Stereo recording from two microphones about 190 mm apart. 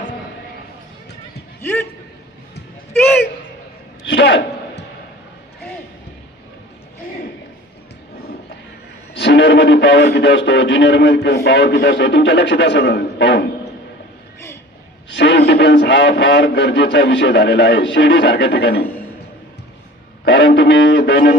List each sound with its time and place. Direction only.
1.6 s speech: 10° left (ahead or behind)
2.9 s a sound: 10° left (ahead or behind)
4.0 s a sound: 65° left (ahead or behind)
9.1 s speech: 70° left (ahead or behind)
15.1 s a man's voice: 65° left (ahead or behind)
20.2 s music: 65° left (ahead or behind)